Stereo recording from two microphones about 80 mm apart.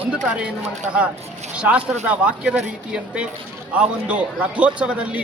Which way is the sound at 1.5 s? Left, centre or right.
Centre.